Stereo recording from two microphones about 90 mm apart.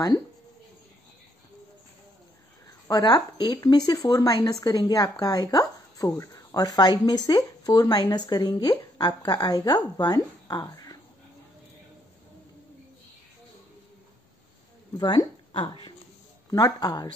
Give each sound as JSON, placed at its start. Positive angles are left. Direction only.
{"t": 2.9, "sound": "speech", "side_deg": 50}
{"t": 15.0, "sound": "speech", "side_deg": 65}
{"t": 16.4, "sound": "speech", "side_deg": 40}